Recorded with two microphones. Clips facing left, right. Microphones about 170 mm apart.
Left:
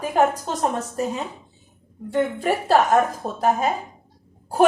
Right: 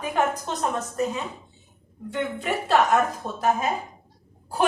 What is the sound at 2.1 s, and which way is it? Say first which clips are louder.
A woman's voice: left 6 dB; 35° left (ahead or behind).